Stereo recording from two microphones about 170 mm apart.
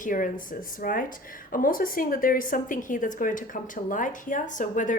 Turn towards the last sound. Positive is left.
turn(degrees=50)  # may be behind; listen again after turning